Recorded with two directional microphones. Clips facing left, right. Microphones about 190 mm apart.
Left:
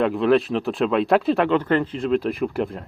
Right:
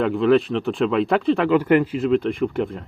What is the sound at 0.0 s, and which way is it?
Speech, centre (ahead or behind).